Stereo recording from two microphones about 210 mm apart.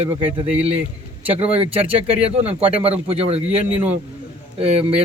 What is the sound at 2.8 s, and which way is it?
Speech, 30° right (ahead or behind).